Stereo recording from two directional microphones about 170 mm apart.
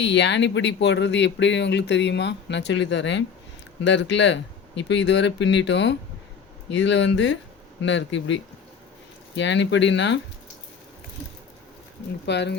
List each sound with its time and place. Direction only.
0.0 s speech: 90° left
12.2 s speech: 90° left